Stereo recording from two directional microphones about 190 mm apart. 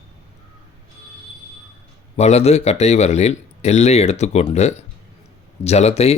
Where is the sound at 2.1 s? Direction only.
35° left (ahead or behind).